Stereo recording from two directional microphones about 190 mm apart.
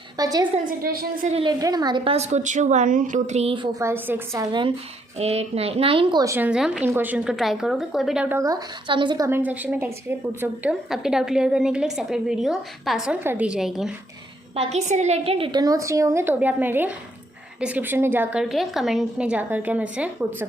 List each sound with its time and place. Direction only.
0.2 s a woman's voice: 20° right (ahead or behind)
0.5 s a woman's voice: 45° right (ahead or behind)
1.3 s a woman's voice: 30° right (ahead or behind)
1.5 s a woman's voice: 20° right (ahead or behind)
2.1 s a woman's voice: 35° right (ahead or behind)
3.8 s a woman's voice: 10° right (ahead or behind)
5.1 s a woman's voice: 35° right (ahead or behind); by 13.9 s centre (ahead or behind)
14.5 s a woman's voice: 35° right (ahead or behind); by 20.5 s 5° right (ahead or behind)